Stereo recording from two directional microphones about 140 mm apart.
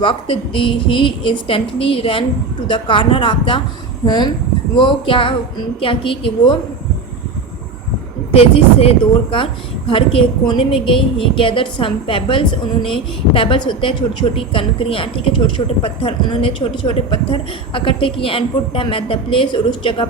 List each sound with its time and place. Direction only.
0.0 s a woman's voice: 35° left (ahead or behind)
8.4 s a woman's voice: 45° left (ahead or behind)